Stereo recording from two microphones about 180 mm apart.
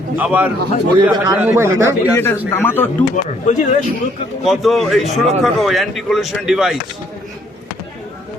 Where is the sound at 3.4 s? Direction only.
40° left (ahead or behind).